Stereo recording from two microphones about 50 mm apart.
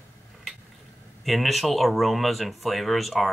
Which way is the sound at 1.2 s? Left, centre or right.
Centre.